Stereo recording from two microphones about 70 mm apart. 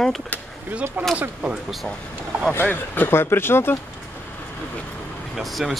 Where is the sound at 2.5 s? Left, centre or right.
Left.